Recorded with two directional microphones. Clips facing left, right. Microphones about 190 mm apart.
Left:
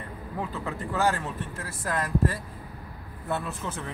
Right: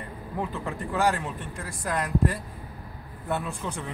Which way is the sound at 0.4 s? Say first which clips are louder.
Right 1 dB; centre (ahead or behind).